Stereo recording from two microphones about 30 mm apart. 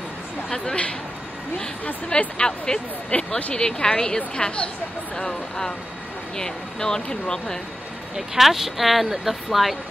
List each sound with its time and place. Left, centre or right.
2.3 s speech: left
3.1 s a sound: left
3.5 s speech: left
4.4 s speech: left
5.1 s speech: centre
8.4 s speech: centre